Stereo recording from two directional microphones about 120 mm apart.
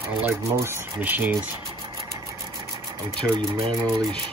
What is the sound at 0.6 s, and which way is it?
Speech, 20° right (ahead or behind).